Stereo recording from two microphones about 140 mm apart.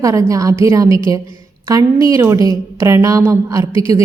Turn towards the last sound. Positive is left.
turn(degrees=-20)  # may be behind; listen again after turning